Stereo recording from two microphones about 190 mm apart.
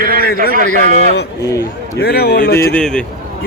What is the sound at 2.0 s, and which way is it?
Speech, 55° left (ahead or behind).